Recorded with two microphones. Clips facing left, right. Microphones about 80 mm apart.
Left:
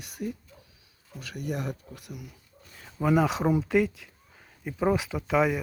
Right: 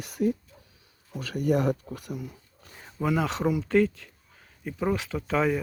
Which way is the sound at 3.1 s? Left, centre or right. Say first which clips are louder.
Left 3 dB; centre.